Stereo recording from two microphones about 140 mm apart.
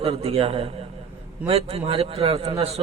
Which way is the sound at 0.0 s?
45° right (ahead or behind).